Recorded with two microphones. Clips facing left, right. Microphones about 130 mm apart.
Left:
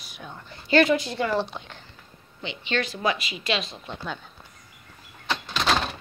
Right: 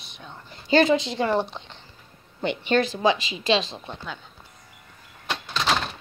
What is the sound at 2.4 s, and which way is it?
Speech, 50° right (ahead or behind).